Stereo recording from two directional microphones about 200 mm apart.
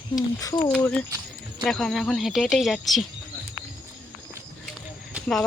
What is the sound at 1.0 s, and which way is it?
Cricket, 15° right (ahead or behind).